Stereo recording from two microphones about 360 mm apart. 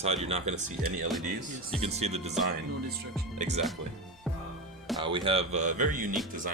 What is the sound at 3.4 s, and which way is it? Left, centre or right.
Speech, centre.